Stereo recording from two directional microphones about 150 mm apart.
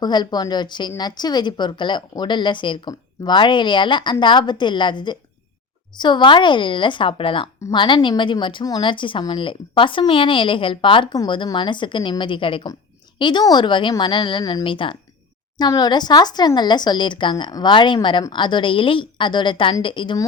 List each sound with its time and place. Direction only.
0.0 s a woman's voice: 30° left (ahead or behind)